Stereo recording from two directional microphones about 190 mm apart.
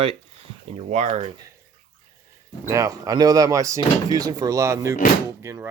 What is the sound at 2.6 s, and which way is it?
Speech, 20° right (ahead or behind).